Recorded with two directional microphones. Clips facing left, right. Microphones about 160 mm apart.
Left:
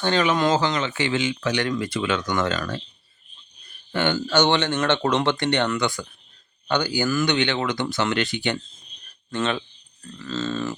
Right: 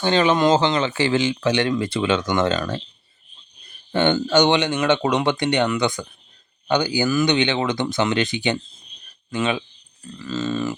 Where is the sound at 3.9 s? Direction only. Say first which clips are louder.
Right 4 dB; 20° right (ahead or behind).